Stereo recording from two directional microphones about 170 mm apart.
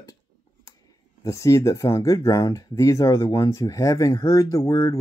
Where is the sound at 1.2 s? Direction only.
20° left (ahead or behind).